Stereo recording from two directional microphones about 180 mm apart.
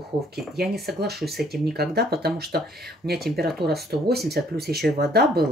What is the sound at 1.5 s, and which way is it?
Speech, 60° right (ahead or behind).